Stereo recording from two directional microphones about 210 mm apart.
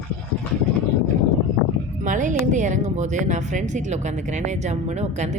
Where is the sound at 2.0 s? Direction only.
35° right (ahead or behind).